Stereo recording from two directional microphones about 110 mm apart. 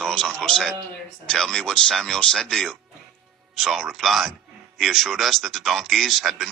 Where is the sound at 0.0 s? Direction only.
5° left (ahead or behind).